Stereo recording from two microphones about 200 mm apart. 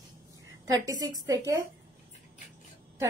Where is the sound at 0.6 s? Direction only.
20° right (ahead or behind).